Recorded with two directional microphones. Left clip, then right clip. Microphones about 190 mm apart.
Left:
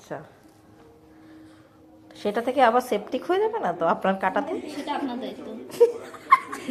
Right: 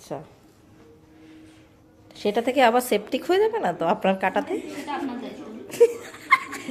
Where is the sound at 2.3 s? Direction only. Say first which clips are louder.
Right 1 dB; 20° right (ahead or behind).